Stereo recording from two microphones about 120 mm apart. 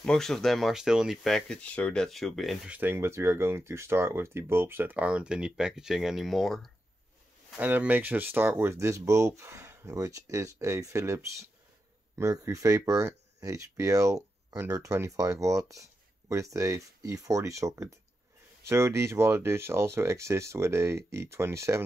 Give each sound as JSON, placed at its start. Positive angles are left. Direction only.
{"t": 0.0, "sound": "speech", "side_deg": 5}
{"t": 2.7, "sound": "speech", "side_deg": -15}
{"t": 7.5, "sound": "speech", "side_deg": -15}